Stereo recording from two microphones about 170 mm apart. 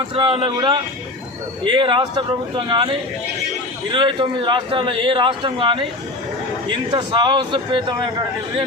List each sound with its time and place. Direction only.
0.1 s a man's voice: 30° right (ahead or behind)
3.9 s a man's voice: 30° right (ahead or behind)